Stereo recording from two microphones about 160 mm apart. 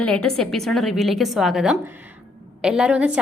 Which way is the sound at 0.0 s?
5° left (ahead or behind).